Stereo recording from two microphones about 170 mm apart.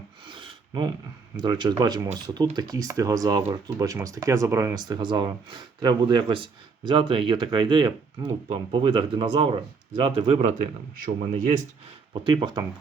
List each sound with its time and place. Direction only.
0.3 s a sound: 30° right (ahead or behind)
1.4 s speech: 25° right (ahead or behind)
11.0 s speech: 50° right (ahead or behind)
12.2 s speech: 30° right (ahead or behind)